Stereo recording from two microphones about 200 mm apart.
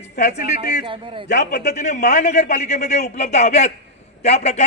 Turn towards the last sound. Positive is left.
turn(degrees=35)  # may be behind; listen again after turning